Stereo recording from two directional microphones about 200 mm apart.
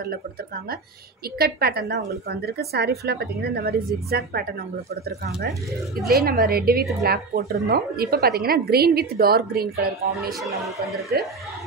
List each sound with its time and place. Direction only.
1.4 s a woman's voice: 50° right (ahead or behind)
6.0 s a woman's voice: 50° right (ahead or behind)
11.1 s a woman's voice: 50° right (ahead or behind)